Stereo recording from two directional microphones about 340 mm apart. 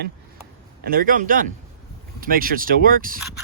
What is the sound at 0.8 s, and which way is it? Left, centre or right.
Speech, right.